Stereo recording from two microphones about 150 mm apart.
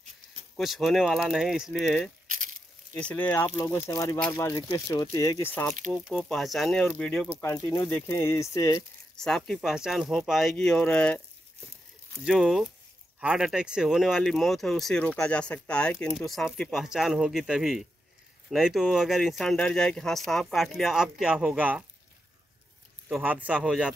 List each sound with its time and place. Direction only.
0.6 s speech: centre (ahead or behind)
2.2 s a sound: 60° right (ahead or behind)
2.9 s speech: 10° left (ahead or behind)
6.0 s speech: 5° left (ahead or behind); by 8.8 s 20° left (ahead or behind)
9.1 s speech: 5° left (ahead or behind)
12.3 s speech: centre (ahead or behind)
23.0 s speech: 10° right (ahead or behind)